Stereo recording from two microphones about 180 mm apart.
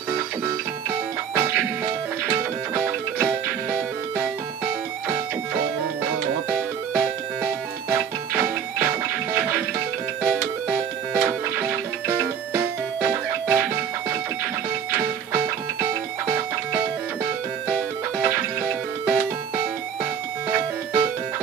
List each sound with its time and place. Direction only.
2.7 s music: 5° right (ahead or behind)
7.9 s music: 10° right (ahead or behind)
10.2 s music: 5° right (ahead or behind)
16.3 s music: 15° right (ahead or behind)
20.4 s music: 15° right (ahead or behind)